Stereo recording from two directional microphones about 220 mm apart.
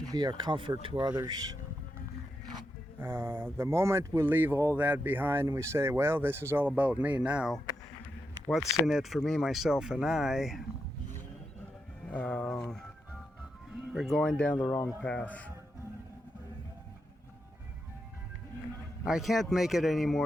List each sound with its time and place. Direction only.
0.0 s speech: 15° right (ahead or behind)
3.0 s speech: 10° right (ahead or behind)
12.1 s speech: 5° left (ahead or behind)
13.9 s speech: centre (ahead or behind)
19.0 s speech: centre (ahead or behind)